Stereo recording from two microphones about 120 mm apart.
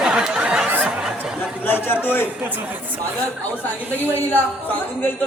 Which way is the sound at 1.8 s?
15° left (ahead or behind).